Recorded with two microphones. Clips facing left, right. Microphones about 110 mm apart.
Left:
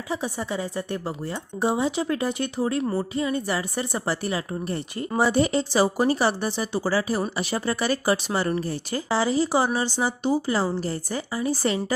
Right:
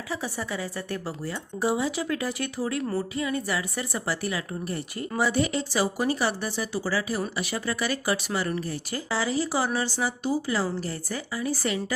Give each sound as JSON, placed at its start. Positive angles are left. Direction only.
{"t": 0.1, "sound": "speech", "side_deg": 20}